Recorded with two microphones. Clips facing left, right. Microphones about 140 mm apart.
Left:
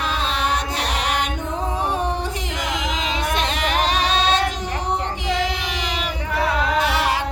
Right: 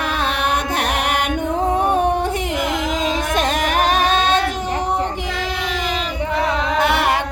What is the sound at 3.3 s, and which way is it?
Music, 45° right (ahead or behind).